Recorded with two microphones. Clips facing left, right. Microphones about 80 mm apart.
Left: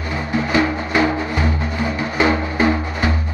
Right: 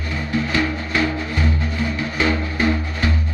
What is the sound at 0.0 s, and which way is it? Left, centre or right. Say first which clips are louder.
Music: left 2 dB; left.